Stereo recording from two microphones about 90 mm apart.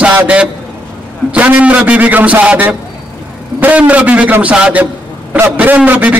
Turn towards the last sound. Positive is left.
turn(degrees=-15)  # may be behind; listen again after turning